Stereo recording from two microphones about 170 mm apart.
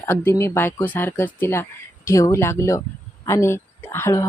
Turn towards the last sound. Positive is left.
turn(degrees=15)  # may be behind; listen again after turning